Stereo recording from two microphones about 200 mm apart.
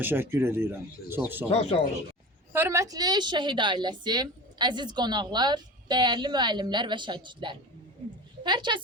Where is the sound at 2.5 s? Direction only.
15° right (ahead or behind).